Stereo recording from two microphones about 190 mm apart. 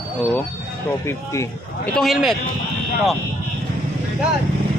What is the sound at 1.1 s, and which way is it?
Speech, 15° left (ahead or behind).